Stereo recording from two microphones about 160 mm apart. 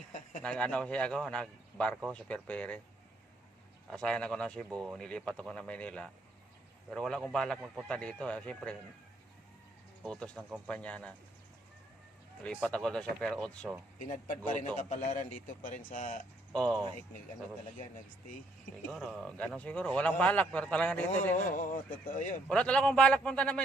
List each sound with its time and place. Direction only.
0.4 s a man's voice: 5° left (ahead or behind)
3.8 s a man's voice: 5° left (ahead or behind)
10.0 s a man's voice: 5° left (ahead or behind)
12.5 s speech: centre (ahead or behind)
14.1 s speech: 55° left (ahead or behind)
16.5 s speech: 5° left (ahead or behind)
18.9 s a man's voice: centre (ahead or behind)
21.3 s speech: 55° left (ahead or behind)
22.4 s a man's voice: 5° left (ahead or behind)